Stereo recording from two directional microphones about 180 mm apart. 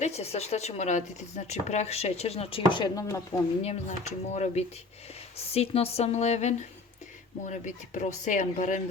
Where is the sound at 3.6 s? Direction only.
40° left (ahead or behind).